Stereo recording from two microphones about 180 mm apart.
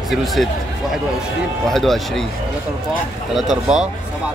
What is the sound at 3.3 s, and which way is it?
Speech, centre (ahead or behind).